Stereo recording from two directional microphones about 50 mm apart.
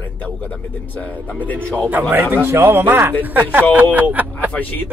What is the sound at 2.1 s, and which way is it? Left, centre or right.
Speech, right.